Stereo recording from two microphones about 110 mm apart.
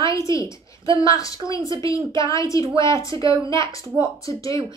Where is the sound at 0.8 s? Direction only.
30° left (ahead or behind).